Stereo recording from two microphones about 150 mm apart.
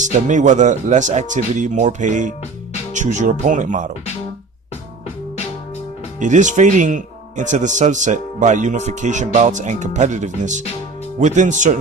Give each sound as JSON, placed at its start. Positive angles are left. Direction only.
{"t": 0.0, "sound": "speech", "side_deg": -55}
{"t": 6.1, "sound": "speech", "side_deg": -55}